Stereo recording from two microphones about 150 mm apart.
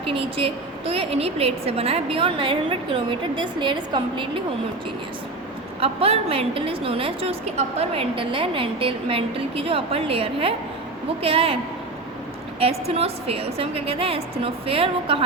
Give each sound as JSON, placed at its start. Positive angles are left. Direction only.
{"t": 0.0, "sound": "a woman's voice", "side_deg": -40}
{"t": 5.8, "sound": "a woman's voice", "side_deg": -40}
{"t": 12.5, "sound": "a woman's voice", "side_deg": -40}